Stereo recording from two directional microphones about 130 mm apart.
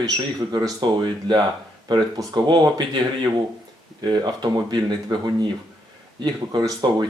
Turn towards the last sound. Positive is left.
turn(degrees=-35)  # may be behind; listen again after turning